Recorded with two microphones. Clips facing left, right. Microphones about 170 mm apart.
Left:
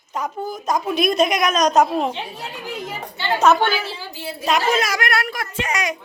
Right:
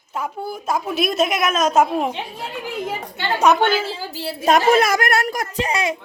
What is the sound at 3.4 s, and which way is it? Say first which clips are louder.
Speech: even; 15° right (ahead or behind).